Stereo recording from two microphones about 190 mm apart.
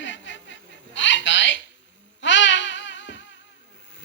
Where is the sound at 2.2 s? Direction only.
75° left (ahead or behind).